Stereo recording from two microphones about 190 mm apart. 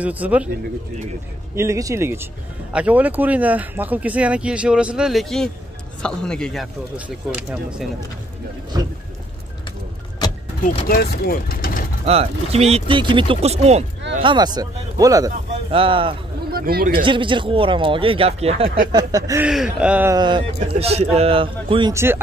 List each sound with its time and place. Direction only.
0.0 s speech: 10° right (ahead or behind)
1.5 s speech: 15° right (ahead or behind)
10.9 s speech: 50° left (ahead or behind)
12.1 s speech: 35° right (ahead or behind)
14.2 s a man's voice: 25° right (ahead or behind)
15.7 s a man's voice: 30° right (ahead or behind)
16.5 s speech: 50° right (ahead or behind)
17.0 s a man's voice: 25° right (ahead or behind)
18.9 s a man's voice: 20° right (ahead or behind)
19.4 s speech: 5° right (ahead or behind)
20.2 s a man's voice: 25° right (ahead or behind)
21.9 s speech: 10° right (ahead or behind)